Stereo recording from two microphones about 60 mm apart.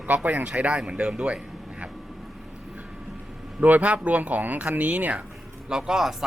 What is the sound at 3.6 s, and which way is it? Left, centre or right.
Speech, right.